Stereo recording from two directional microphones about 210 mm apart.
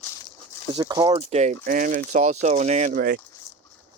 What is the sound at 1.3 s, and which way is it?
Speech, 35° right (ahead or behind).